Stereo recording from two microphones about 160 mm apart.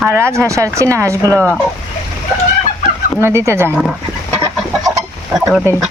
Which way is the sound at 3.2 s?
15° right (ahead or behind).